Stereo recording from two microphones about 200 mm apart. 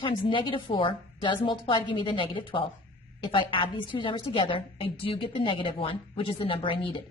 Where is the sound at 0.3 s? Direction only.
25° left (ahead or behind).